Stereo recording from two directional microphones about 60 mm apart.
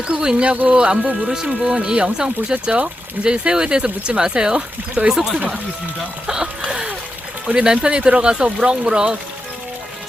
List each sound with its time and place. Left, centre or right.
0.1 s speech: centre
6.7 s splash: centre
7.4 s speech: centre